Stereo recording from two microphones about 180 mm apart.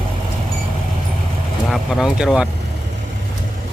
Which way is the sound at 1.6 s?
Centre (ahead or behind).